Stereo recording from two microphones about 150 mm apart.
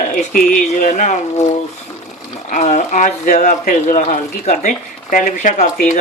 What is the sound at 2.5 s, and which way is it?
Speech, 60° left (ahead or behind).